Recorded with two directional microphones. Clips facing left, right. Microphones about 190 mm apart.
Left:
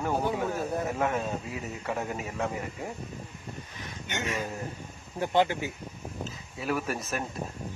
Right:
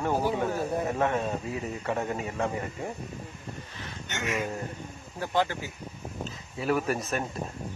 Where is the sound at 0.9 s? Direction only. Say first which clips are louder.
Right 2 dB; centre (ahead or behind).